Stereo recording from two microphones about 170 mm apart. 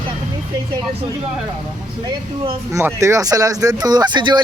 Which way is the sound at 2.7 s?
15° right (ahead or behind).